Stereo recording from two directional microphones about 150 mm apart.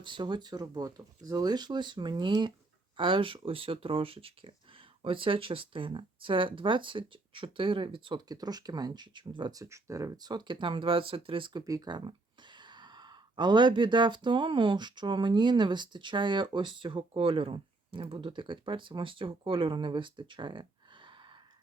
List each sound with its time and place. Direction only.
0.0 s speech: 30° right (ahead or behind)